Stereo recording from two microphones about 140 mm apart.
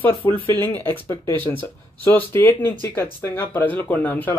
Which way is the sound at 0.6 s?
15° left (ahead or behind).